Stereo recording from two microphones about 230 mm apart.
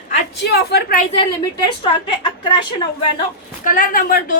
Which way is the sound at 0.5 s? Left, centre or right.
Left.